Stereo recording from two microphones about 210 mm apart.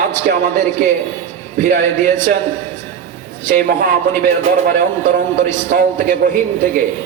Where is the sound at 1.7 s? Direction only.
40° right (ahead or behind).